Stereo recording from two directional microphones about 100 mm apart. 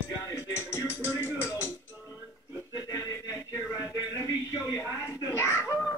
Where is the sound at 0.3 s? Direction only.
25° left (ahead or behind).